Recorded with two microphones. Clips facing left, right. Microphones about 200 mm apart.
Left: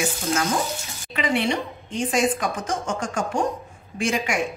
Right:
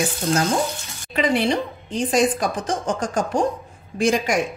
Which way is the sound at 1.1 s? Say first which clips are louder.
Right 3 dB; 35° right (ahead or behind).